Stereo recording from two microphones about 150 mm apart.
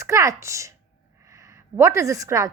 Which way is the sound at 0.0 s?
20° right (ahead or behind).